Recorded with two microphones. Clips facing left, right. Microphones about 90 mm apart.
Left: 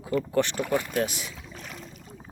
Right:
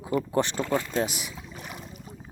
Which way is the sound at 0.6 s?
15° left (ahead or behind).